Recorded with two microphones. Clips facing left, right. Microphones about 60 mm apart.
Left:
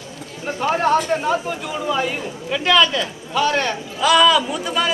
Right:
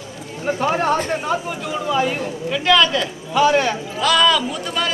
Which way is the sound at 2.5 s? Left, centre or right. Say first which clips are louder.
Even; centre.